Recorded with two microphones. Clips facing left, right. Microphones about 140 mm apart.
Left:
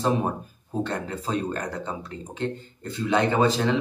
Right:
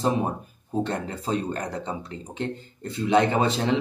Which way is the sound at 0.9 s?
30° right (ahead or behind).